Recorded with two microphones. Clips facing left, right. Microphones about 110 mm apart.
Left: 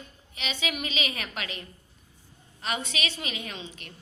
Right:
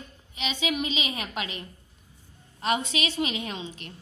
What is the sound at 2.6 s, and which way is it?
Speech, 30° right (ahead or behind).